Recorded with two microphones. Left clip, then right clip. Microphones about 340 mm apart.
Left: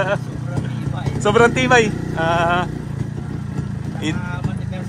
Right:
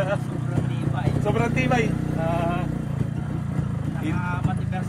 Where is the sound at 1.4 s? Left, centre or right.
Left.